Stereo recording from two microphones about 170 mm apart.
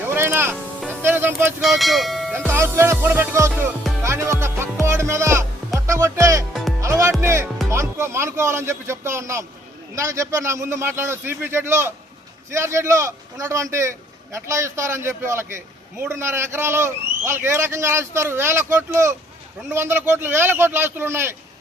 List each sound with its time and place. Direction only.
0.1 s music: 15° right (ahead or behind)
1.6 s speech: centre (ahead or behind)
2.5 s a man's voice: 15° right (ahead or behind)
4.0 s music: 15° right (ahead or behind)
5.8 s speech: 15° right (ahead or behind)
6.8 s music: 20° right (ahead or behind)
7.2 s a man's voice: 15° right (ahead or behind)